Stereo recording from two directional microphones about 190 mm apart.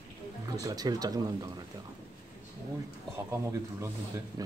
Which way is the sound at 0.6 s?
20° right (ahead or behind).